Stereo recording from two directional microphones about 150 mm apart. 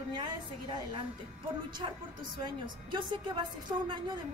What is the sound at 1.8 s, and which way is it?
A woman's voice, 35° right (ahead or behind).